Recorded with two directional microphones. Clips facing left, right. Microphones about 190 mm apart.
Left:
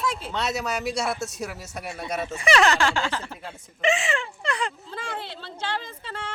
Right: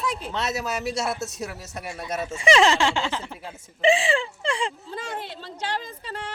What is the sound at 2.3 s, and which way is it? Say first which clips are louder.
Speech: right 2 dB; 25° right (ahead or behind).